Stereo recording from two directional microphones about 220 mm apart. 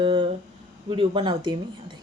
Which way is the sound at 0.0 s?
20° right (ahead or behind).